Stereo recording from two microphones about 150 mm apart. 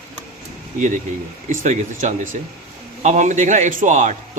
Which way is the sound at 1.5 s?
55° right (ahead or behind).